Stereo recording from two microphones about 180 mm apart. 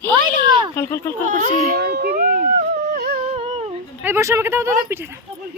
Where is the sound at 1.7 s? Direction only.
60° right (ahead or behind).